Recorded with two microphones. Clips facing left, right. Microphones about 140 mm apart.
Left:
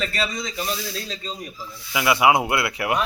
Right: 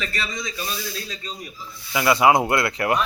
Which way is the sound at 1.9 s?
10° left (ahead or behind).